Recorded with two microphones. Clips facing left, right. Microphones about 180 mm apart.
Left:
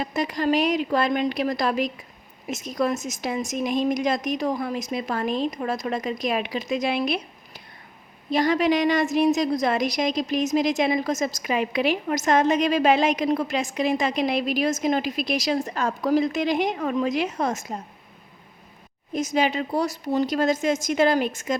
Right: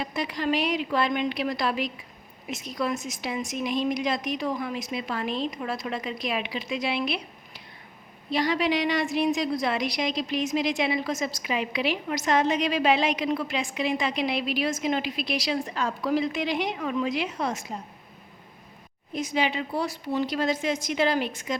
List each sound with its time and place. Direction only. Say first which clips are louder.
0.0 s a woman's voice: left 4 dB; 45° left (ahead or behind)
19.1 s a woman's voice: left 4 dB; 45° left (ahead or behind)